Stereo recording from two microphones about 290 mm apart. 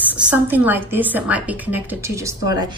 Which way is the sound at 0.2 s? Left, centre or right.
Centre.